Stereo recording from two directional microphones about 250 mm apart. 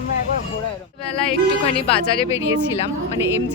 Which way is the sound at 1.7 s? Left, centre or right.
Left.